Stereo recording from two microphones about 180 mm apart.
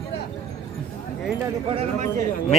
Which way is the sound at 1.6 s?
35° right (ahead or behind).